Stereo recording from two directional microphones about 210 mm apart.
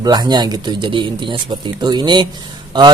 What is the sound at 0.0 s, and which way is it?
A man's voice, 20° right (ahead or behind).